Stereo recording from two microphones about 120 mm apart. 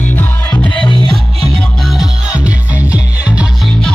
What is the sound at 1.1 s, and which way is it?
Music, centre (ahead or behind).